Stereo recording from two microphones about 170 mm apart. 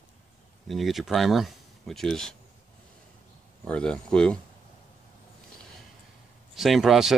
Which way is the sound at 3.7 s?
5° left (ahead or behind).